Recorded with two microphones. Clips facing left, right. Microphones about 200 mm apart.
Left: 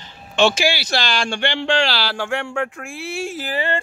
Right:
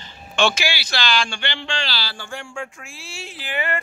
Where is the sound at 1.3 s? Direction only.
80° left; by 3.5 s 45° left (ahead or behind).